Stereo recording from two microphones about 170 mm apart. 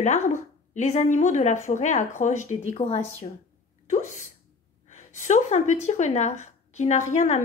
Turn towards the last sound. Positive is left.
turn(degrees=45)  # may be behind; listen again after turning